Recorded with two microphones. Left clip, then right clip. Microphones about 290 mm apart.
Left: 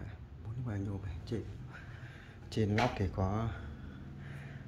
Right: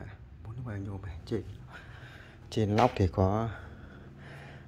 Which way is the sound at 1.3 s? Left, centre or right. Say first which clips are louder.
Right 6 dB; centre.